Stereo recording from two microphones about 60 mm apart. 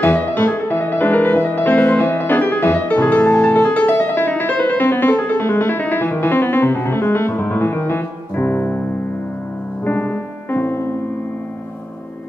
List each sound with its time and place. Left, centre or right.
0.0 s music: left
9.8 s piano: left